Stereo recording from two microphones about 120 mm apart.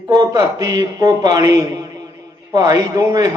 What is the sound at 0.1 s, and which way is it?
A man's voice, 30° right (ahead or behind).